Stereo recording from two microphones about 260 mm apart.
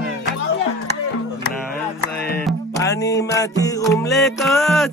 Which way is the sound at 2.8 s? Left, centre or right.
Centre.